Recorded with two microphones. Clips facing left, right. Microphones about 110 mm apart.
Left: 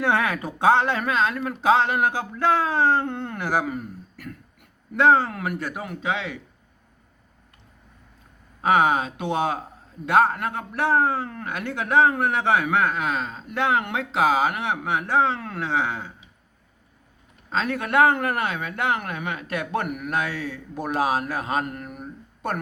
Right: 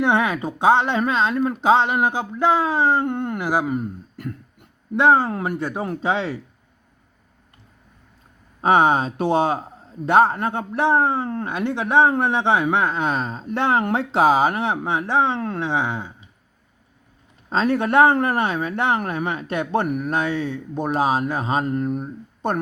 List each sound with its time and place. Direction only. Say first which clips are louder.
0.0 s a man's voice: right 3 dB; 20° right (ahead or behind)
8.6 s a man's voice: right 3 dB; 30° right (ahead or behind)
17.5 s a man's voice: right 5 dB; 30° right (ahead or behind)